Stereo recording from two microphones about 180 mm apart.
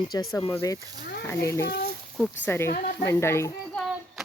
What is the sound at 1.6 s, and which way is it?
A woman's voice, 60° left (ahead or behind).